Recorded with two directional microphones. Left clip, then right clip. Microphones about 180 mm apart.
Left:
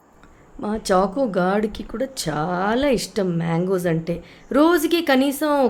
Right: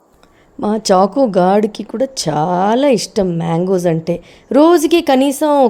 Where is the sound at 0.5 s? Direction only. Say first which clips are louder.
Right 8 dB; 40° right (ahead or behind).